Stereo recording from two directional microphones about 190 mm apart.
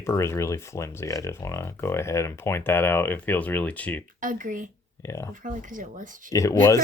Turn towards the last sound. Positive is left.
turn(degrees=15)  # may be behind; listen again after turning